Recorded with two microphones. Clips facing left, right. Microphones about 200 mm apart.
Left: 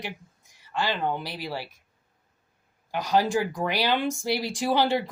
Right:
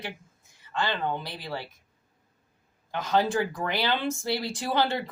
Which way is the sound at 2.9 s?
10° left (ahead or behind).